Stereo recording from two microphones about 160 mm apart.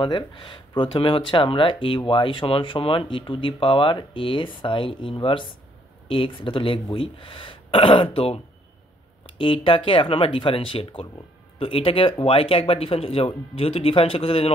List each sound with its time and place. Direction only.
0.0 s speech: 30° left (ahead or behind)
9.4 s speech: 30° left (ahead or behind)